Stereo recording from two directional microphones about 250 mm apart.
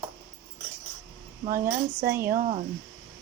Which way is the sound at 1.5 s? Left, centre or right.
Right.